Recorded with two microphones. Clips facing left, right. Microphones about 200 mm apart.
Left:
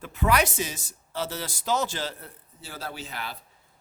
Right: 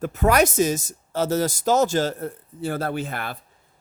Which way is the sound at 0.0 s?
45° right (ahead or behind).